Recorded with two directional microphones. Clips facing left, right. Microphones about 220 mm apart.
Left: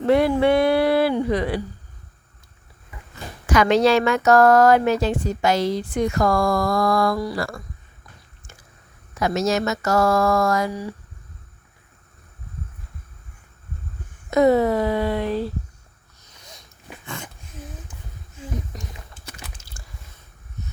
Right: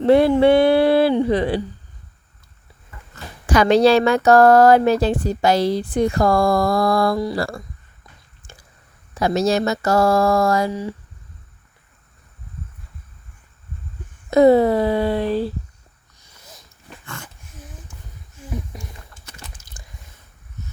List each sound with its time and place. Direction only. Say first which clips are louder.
0.0 s a woman's voice: right 4 dB; 30° right (ahead or behind)
3.4 s speech: right 3 dB; 35° right (ahead or behind)
9.1 s speech: right 3 dB; 30° right (ahead or behind)
14.3 s speech: right 4 dB; 30° right (ahead or behind)
16.3 s sniff: even; 5° right (ahead or behind)
19.8 s squish: even; 15° right (ahead or behind)